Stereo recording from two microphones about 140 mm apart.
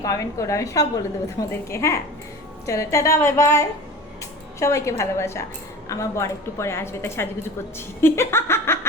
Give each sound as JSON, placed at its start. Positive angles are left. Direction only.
{"t": 0.0, "sound": "a woman's voice", "side_deg": 25}